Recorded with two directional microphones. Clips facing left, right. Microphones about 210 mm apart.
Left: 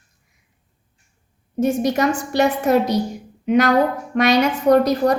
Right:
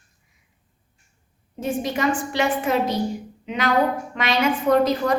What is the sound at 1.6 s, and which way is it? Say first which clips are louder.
A woman's voice: left 6 dB; 45° left (ahead or behind).